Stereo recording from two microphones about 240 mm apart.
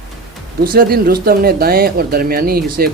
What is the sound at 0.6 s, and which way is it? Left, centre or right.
Speech, right.